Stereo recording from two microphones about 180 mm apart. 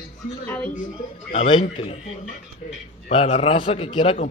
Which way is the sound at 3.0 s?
40° left (ahead or behind).